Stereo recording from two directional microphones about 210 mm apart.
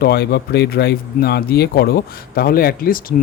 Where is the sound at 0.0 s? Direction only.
50° left (ahead or behind).